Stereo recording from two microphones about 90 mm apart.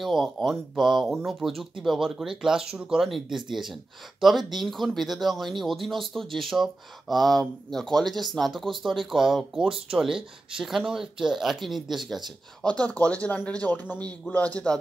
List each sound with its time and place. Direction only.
0.0 s speech: 5° right (ahead or behind)
12.6 s speech: 15° left (ahead or behind)